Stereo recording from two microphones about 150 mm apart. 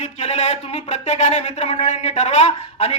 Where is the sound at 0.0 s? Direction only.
45° left (ahead or behind).